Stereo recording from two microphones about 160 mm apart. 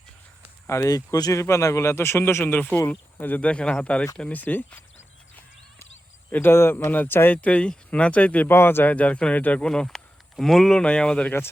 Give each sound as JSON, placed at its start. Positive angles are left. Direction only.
{"t": 0.7, "sound": "speech", "side_deg": 20}
{"t": 6.3, "sound": "speech", "side_deg": 15}